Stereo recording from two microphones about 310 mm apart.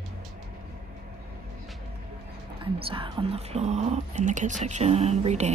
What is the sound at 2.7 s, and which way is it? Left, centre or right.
Speech, centre.